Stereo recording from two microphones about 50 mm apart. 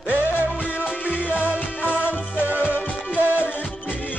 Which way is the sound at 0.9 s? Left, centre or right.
Left.